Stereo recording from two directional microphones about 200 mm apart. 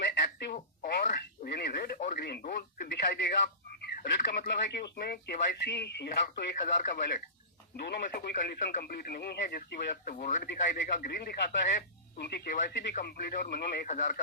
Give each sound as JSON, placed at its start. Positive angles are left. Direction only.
{"t": 0.0, "sound": "telephone", "side_deg": 55}
{"t": 0.5, "sound": "radio", "side_deg": 40}
{"t": 0.9, "sound": "radio", "side_deg": 55}
{"t": 2.6, "sound": "speech", "side_deg": 55}